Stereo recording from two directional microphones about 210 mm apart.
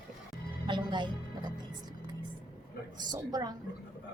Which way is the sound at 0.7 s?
20° right (ahead or behind).